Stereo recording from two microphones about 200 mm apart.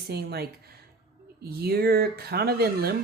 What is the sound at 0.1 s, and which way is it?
Speech, 55° right (ahead or behind).